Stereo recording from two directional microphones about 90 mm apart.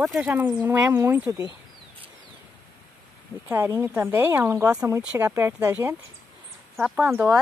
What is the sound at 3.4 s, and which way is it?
Speech, 20° right (ahead or behind).